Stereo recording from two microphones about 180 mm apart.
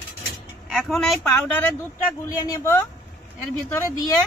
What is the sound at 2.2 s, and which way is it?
Speech, 20° left (ahead or behind).